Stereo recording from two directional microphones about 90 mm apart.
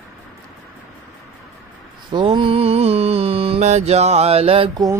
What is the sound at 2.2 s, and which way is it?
Music, 85° right.